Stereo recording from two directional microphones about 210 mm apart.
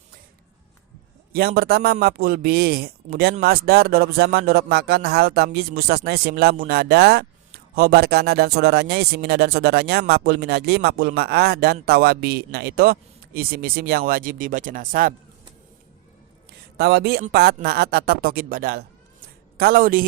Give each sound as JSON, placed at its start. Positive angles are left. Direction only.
{"t": 1.3, "sound": "speech", "side_deg": -45}
{"t": 16.7, "sound": "speech", "side_deg": -50}